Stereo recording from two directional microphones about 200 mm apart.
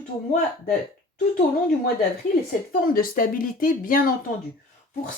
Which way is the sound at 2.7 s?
45° left (ahead or behind).